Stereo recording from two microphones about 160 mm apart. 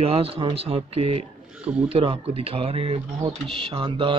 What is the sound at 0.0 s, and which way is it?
Speech, 35° right (ahead or behind).